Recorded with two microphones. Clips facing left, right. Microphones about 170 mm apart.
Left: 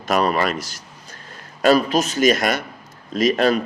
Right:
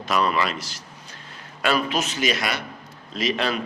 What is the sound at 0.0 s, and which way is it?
A man's voice, 45° left (ahead or behind).